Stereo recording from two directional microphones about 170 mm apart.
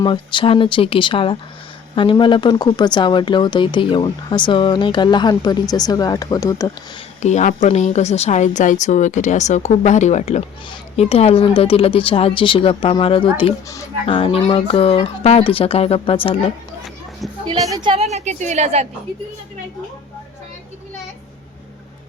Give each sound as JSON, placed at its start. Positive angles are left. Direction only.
{"t": 0.0, "sound": "speech", "side_deg": 30}
{"t": 7.2, "sound": "speech", "side_deg": 45}
{"t": 17.6, "sound": "a woman's voice", "side_deg": -25}